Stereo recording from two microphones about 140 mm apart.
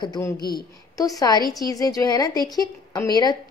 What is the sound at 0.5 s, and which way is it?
A woman's voice, 25° left (ahead or behind).